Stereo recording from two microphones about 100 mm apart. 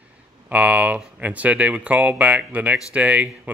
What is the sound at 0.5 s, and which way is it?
Speech, 15° right (ahead or behind).